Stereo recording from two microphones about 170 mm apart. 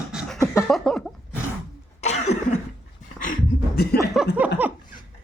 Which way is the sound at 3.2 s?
60° left (ahead or behind).